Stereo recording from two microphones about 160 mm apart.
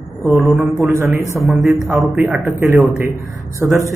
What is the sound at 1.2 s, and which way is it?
Speech, 20° left (ahead or behind).